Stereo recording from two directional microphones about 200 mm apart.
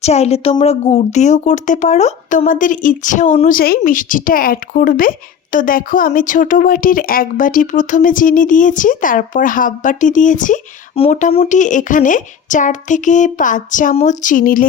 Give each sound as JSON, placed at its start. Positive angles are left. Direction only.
{"t": 0.0, "sound": "a woman's voice", "side_deg": 30}